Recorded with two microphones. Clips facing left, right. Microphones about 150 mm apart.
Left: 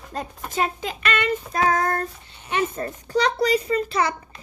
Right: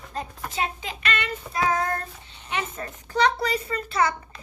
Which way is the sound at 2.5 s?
35° left (ahead or behind).